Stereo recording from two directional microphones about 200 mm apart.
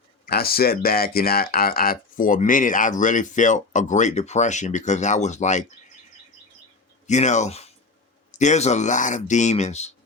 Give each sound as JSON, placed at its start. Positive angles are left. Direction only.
{"t": 0.3, "sound": "speech", "side_deg": 50}
{"t": 7.1, "sound": "speech", "side_deg": 35}